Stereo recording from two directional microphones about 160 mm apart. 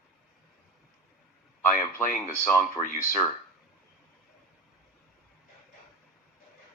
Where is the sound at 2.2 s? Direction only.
15° left (ahead or behind).